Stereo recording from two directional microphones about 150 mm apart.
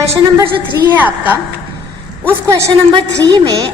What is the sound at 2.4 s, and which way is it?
Speech, 20° right (ahead or behind).